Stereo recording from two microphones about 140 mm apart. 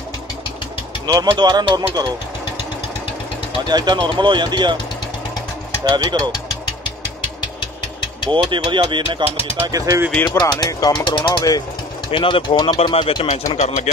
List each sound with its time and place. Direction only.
1.0 s speech: 30° right (ahead or behind)
3.6 s speech: 30° right (ahead or behind)
5.9 s speech: 30° right (ahead or behind)
8.3 s speech: 35° right (ahead or behind)
9.6 s speech: 25° right (ahead or behind)
10.2 s speech: 30° left (ahead or behind)
13.6 s speech: 55° left (ahead or behind)